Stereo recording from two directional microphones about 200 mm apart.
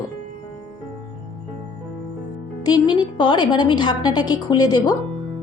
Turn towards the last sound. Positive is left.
turn(degrees=20)  # may be behind; listen again after turning